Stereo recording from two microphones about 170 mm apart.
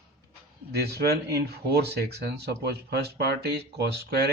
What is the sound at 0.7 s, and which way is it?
Speech, 70° right (ahead or behind).